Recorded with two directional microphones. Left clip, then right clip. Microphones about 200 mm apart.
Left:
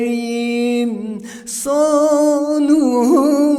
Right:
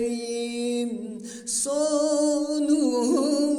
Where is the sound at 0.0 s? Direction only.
25° left (ahead or behind).